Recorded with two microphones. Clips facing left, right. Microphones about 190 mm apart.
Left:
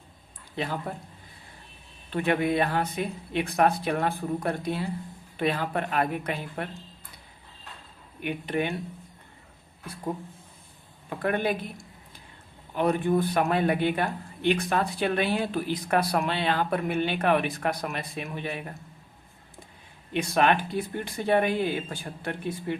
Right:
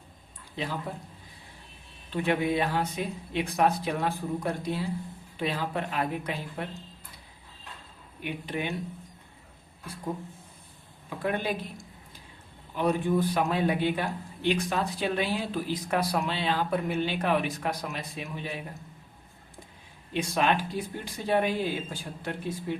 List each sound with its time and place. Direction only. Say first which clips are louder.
0.5 s speech: left 2 dB; 60° left (ahead or behind)
2.0 s speech: left 2 dB; 55° left (ahead or behind)
8.2 s speech: left 4 dB; 55° left (ahead or behind)
11.2 s speech: left 3 dB; 60° left (ahead or behind)
12.7 s speech: left 2 dB; 55° left (ahead or behind)
20.3 s speech: left 3 dB; 60° left (ahead or behind)